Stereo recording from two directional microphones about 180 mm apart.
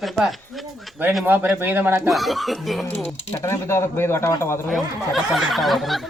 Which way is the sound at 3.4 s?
15° left (ahead or behind).